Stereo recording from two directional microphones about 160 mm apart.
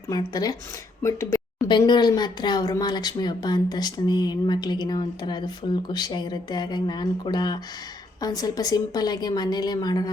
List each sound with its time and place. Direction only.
0.1 s speech: 25° left (ahead or behind)
1.6 s speech: 30° left (ahead or behind)